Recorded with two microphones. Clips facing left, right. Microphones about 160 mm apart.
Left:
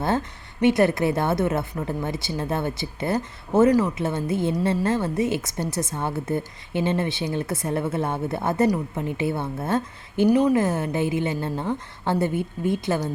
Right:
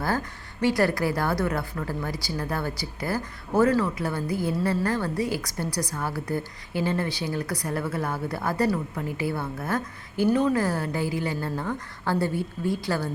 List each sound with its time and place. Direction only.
0.0 s a woman's voice: 25° left (ahead or behind)